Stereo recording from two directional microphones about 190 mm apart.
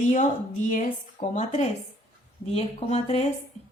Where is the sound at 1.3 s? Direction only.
40° left (ahead or behind).